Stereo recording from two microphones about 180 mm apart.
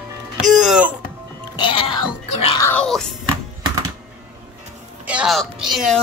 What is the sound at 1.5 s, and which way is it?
Music, 30° left (ahead or behind).